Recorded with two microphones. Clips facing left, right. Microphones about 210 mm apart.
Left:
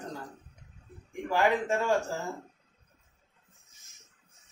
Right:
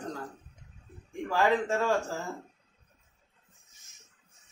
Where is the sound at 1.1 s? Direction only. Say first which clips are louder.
Even; 15° left (ahead or behind).